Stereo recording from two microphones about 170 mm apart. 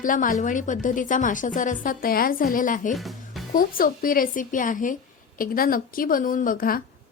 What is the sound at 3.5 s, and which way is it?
Speech, 55° left (ahead or behind).